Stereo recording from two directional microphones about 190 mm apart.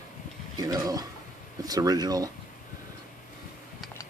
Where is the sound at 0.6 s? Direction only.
20° right (ahead or behind).